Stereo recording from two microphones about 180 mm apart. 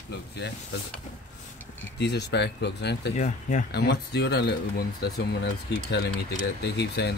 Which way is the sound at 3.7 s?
65° left (ahead or behind).